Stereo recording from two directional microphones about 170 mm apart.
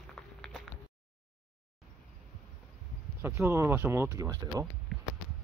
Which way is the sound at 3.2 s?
15° right (ahead or behind).